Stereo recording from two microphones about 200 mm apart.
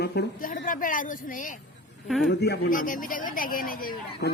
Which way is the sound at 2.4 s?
50° left (ahead or behind).